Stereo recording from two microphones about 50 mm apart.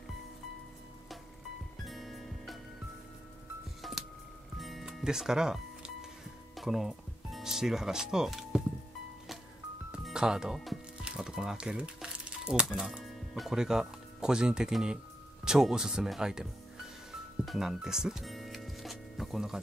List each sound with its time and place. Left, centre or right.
1.9 s music: centre
3.8 s music: centre
5.0 s music: centre
6.5 s speech: centre
8.3 s music: centre
10.1 s speech: centre
11.0 s music: centre
11.5 s speech: right
12.8 s speech: centre
17.6 s speech: centre
18.2 s music: centre